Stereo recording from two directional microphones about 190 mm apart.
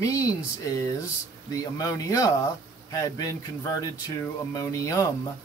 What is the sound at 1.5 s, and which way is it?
Speech, 20° left (ahead or behind).